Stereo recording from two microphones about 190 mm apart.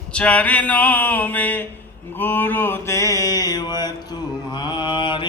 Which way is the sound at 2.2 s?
10° left (ahead or behind).